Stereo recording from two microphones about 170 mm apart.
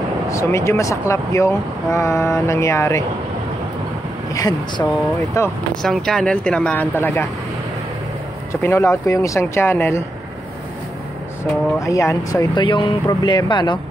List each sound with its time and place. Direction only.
0.3 s speech: 15° left (ahead or behind)
4.3 s speech: 20° left (ahead or behind)
5.8 s speech: centre (ahead or behind)
8.6 s speech: 15° left (ahead or behind)
11.8 s speech: 20° left (ahead or behind)